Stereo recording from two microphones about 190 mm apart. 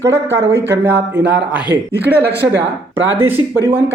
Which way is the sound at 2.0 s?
10° right (ahead or behind).